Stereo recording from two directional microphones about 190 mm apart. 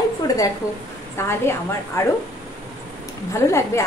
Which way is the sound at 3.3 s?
15° left (ahead or behind).